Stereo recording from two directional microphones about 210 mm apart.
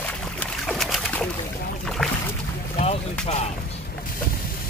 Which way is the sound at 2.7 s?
30° left (ahead or behind).